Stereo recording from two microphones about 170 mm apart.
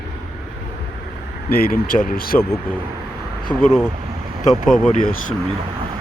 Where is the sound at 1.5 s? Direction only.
65° left (ahead or behind).